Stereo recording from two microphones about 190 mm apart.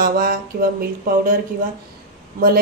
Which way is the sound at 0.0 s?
50° right (ahead or behind).